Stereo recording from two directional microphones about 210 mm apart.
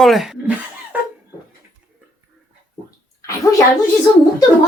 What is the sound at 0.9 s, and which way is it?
Cough, 5° right (ahead or behind).